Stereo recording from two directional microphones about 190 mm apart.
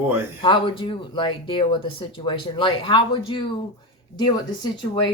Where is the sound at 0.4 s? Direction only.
25° left (ahead or behind).